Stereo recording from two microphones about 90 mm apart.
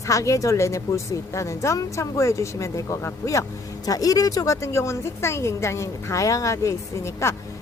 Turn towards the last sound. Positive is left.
turn(degrees=30)  # may be behind; listen again after turning